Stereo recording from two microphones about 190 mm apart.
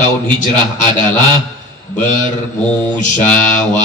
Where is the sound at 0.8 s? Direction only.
25° right (ahead or behind).